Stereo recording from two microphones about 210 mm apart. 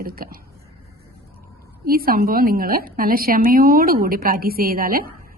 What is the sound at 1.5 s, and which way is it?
A woman's voice, 45° right (ahead or behind).